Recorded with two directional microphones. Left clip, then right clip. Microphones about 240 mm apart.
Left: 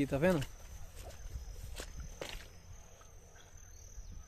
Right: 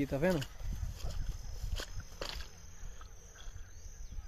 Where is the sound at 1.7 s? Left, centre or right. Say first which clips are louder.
Right 3 dB; centre.